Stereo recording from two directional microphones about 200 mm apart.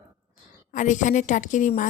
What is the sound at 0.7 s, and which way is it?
Speech, 40° left (ahead or behind).